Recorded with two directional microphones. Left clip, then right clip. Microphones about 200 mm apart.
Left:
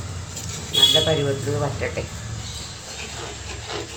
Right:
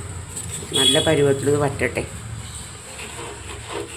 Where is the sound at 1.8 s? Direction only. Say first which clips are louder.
Right 4 dB; 45° right (ahead or behind).